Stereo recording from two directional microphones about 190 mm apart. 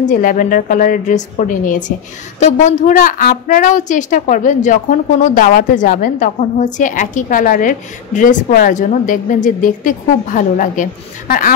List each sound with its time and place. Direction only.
0.0 s a woman's voice: 45° left (ahead or behind)